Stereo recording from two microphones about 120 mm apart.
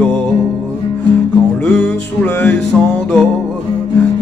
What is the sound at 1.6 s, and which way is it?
Music, 10° left (ahead or behind).